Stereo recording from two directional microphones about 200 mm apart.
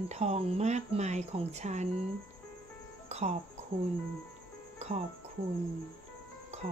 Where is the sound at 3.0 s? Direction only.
35° right (ahead or behind).